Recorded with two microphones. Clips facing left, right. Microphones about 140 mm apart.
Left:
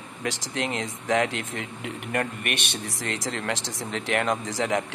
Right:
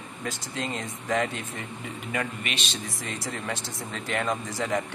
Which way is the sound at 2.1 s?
60° left (ahead or behind).